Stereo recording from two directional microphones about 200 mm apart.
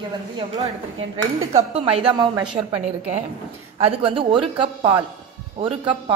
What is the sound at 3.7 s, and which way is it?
A woman's voice, 25° right (ahead or behind).